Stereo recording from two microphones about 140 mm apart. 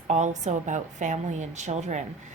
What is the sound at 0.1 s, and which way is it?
A woman's voice, 55° right (ahead or behind).